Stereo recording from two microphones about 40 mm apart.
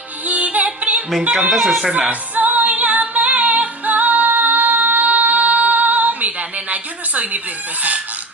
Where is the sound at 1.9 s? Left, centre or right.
Right.